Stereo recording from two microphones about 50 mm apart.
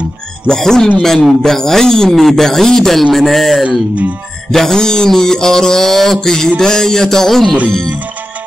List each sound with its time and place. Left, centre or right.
0.5 s music: centre
1.4 s speech: centre
3.6 s speech: right
4.5 s music: centre